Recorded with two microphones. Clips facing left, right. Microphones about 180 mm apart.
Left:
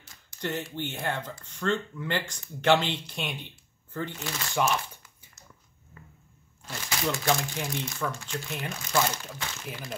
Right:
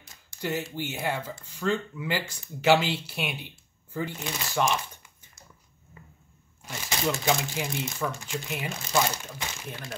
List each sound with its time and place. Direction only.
0.4 s speech: 10° right (ahead or behind)
5.9 s a sound: 15° right (ahead or behind)
6.6 s speech: 10° right (ahead or behind)